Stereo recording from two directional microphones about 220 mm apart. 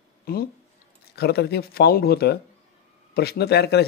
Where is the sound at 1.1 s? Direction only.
45° left (ahead or behind).